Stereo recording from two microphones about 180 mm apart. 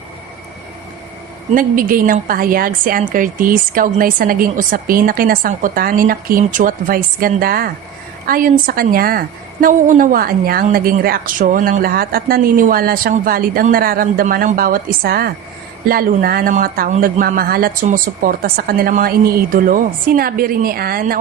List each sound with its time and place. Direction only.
1.5 s a woman's voice: 50° right (ahead or behind)